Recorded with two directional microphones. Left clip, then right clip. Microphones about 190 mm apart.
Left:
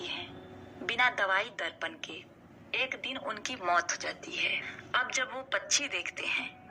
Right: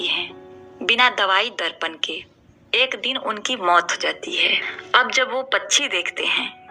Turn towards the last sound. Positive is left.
turn(degrees=-45)  # may be behind; listen again after turning